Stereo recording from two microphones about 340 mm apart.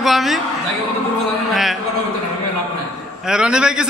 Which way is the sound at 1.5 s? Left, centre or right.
Centre.